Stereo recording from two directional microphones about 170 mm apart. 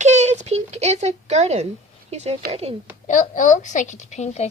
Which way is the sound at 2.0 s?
40° right (ahead or behind).